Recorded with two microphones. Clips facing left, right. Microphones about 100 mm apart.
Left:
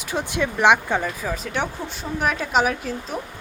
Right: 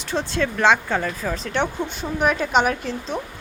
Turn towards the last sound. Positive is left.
turn(degrees=5)  # may be behind; listen again after turning